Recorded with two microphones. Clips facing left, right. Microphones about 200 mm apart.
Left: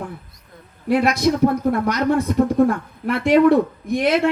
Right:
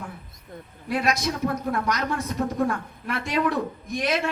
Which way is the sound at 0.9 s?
60° left (ahead or behind).